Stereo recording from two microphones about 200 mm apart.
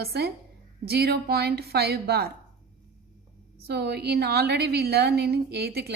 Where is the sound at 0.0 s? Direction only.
55° right (ahead or behind).